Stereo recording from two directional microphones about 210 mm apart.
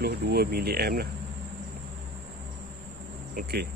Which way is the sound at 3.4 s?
50° right (ahead or behind).